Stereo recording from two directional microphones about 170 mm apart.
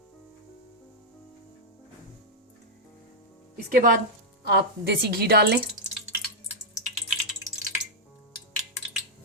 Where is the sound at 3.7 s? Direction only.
55° right (ahead or behind).